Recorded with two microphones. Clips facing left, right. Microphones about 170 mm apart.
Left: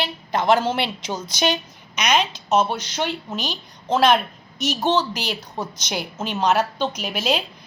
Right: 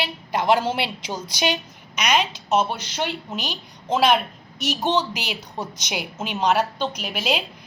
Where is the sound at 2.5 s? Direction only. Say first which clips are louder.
Left 2 dB; 40° left (ahead or behind).